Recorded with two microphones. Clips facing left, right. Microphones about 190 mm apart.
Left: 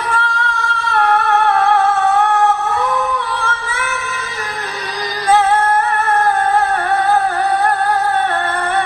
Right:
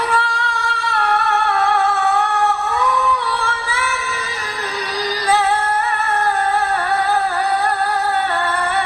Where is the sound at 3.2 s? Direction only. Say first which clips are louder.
Left 1 dB; 55° left (ahead or behind).